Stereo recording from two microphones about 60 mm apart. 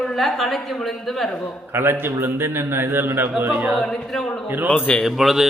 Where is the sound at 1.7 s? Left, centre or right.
Right.